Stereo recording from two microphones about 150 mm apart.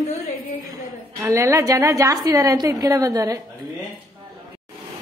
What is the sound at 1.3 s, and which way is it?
A woman's voice, 20° right (ahead or behind).